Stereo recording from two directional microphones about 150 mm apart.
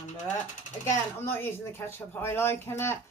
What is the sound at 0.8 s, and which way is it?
Speech, 15° left (ahead or behind).